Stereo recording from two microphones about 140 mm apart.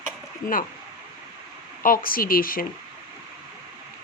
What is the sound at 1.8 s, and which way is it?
Speech, 90° left.